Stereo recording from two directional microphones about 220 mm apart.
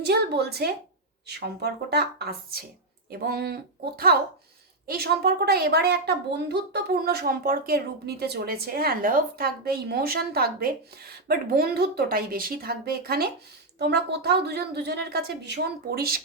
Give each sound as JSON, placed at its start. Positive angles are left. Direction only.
{"t": 0.0, "sound": "a woman's voice", "side_deg": -50}